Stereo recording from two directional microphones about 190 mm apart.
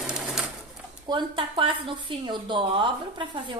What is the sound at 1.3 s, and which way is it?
A woman's voice, 25° right (ahead or behind).